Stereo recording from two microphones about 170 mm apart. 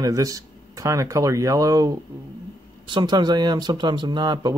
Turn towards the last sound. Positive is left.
turn(degrees=-25)  # may be behind; listen again after turning